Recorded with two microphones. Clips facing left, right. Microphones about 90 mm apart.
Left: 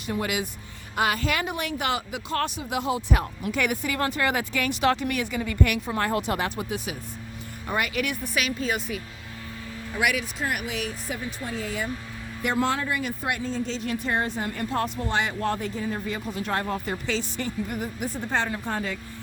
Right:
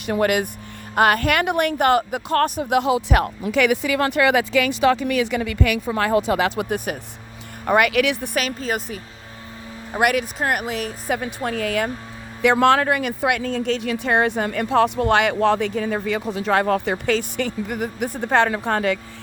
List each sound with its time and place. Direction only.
0.0 s speech: 65° right (ahead or behind); by 6.7 s 90° right
6.7 s speech: 55° right (ahead or behind)
7.7 s speech: 70° right (ahead or behind)
8.4 s speech: 40° right (ahead or behind)
9.9 s speech: 50° right (ahead or behind)
11.1 s speech: 65° right (ahead or behind)
12.4 s speech: 90° right; by 18.9 s 75° right (ahead or behind)